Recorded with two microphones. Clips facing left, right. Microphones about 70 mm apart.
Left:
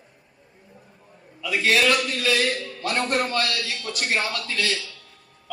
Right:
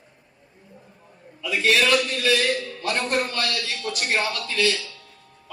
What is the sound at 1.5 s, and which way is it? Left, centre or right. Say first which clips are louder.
Speech: even; left.